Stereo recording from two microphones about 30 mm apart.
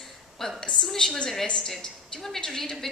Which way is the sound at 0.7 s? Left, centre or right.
Centre.